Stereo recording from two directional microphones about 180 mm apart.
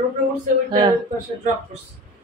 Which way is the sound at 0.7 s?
25° right (ahead or behind).